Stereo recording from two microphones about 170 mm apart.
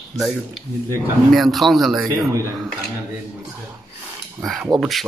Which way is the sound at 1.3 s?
Centre (ahead or behind).